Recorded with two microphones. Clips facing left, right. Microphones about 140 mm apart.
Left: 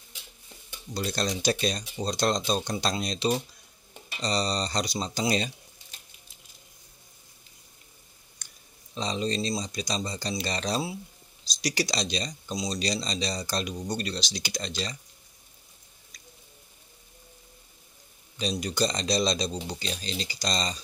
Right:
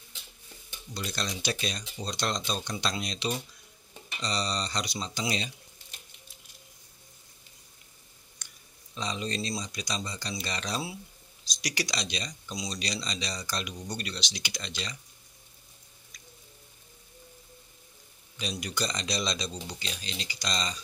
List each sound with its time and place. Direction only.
0.9 s speech: 40° left (ahead or behind)
8.4 s a sound: 35° left (ahead or behind)
8.9 s speech: 30° left (ahead or behind)
18.4 s speech: 35° left (ahead or behind)